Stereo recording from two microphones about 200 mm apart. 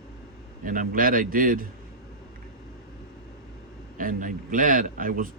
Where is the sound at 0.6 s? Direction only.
45° right (ahead or behind).